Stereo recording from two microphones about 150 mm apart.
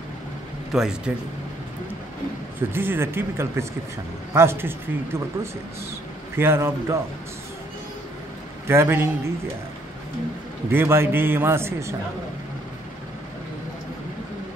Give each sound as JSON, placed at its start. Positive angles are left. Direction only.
{"t": 0.7, "sound": "speech", "side_deg": -5}
{"t": 2.7, "sound": "a man's voice", "side_deg": -15}
{"t": 6.3, "sound": "a man's voice", "side_deg": -15}
{"t": 8.6, "sound": "a man's voice", "side_deg": -15}
{"t": 10.7, "sound": "a man's voice", "side_deg": -15}